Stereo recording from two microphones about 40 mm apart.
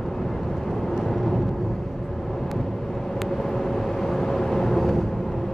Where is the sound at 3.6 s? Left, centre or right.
Centre.